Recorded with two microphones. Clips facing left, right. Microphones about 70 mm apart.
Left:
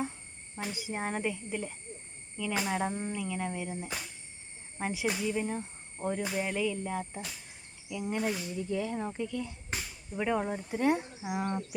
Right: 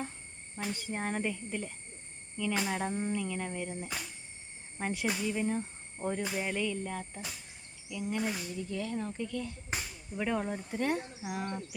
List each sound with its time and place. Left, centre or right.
0.5 s speech: centre
11.2 s speech: left